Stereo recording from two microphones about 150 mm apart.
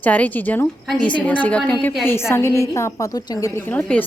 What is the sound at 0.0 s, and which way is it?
A woman's voice, 10° left (ahead or behind).